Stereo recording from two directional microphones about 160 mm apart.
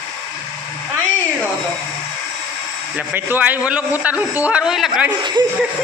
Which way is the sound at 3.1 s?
10° right (ahead or behind).